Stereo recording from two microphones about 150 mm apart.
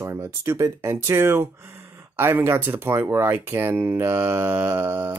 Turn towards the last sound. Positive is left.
turn(degrees=-10)  # may be behind; listen again after turning